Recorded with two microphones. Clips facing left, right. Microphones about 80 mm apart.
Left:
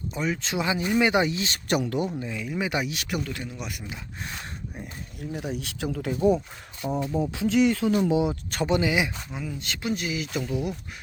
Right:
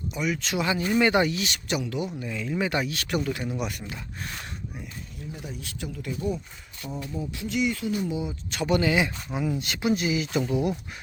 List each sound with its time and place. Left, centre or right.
0.1 s speech: left
1.6 s speech: left
2.1 s speech: centre
3.2 s speech: centre
3.6 s speech: centre
5.3 s speech: left
6.8 s speech: left
7.2 s speech: left
8.6 s speech: centre
9.3 s speech: centre